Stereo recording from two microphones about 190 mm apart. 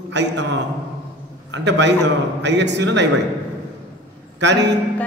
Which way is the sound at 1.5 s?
65° right (ahead or behind).